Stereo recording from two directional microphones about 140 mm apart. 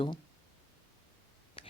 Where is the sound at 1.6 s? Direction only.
40° left (ahead or behind).